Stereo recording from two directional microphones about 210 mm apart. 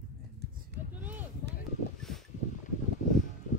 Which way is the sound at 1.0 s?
10° right (ahead or behind).